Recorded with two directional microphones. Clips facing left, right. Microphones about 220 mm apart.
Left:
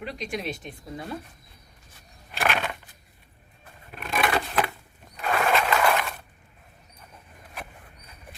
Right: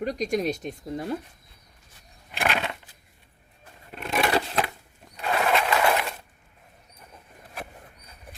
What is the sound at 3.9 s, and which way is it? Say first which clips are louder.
Scissors: right 2 dB; 25° right (ahead or behind).